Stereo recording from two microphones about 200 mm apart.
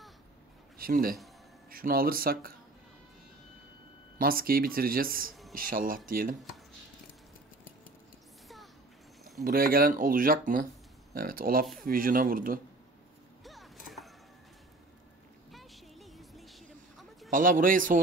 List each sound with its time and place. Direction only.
0.7 s speech: 45° right (ahead or behind)
4.2 s speech: 45° right (ahead or behind)
9.4 s speech: 45° right (ahead or behind)
13.4 s a sound: centre (ahead or behind)
15.5 s a sound: centre (ahead or behind)
17.3 s speech: 45° right (ahead or behind)